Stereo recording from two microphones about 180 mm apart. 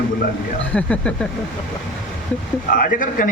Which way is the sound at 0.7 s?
5° left (ahead or behind).